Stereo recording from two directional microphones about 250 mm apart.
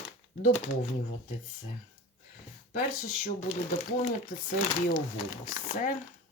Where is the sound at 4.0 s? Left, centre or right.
Left.